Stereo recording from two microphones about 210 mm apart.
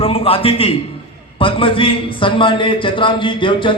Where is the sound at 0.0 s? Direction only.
25° left (ahead or behind).